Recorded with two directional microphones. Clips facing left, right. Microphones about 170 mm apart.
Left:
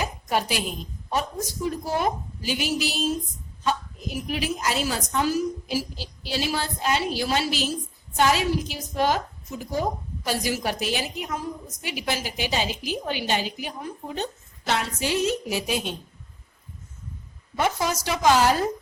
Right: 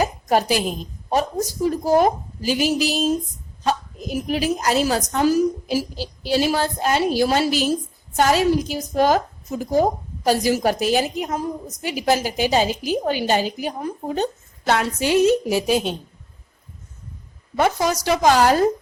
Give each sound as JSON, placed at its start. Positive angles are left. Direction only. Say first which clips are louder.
{"t": 0.0, "sound": "a sound", "louder": "right 7 dB", "side_deg": -40}
{"t": 1.1, "sound": "a woman's voice", "louder": "right 6 dB", "side_deg": -40}
{"t": 14.7, "sound": "a woman's voice", "louder": "right 6 dB", "side_deg": -55}
{"t": 15.4, "sound": "a woman's voice", "louder": "right 7 dB", "side_deg": -35}
{"t": 17.6, "sound": "a woman's voice", "louder": "right 5 dB", "side_deg": -40}